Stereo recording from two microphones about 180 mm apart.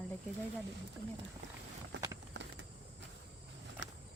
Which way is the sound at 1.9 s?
75° right (ahead or behind).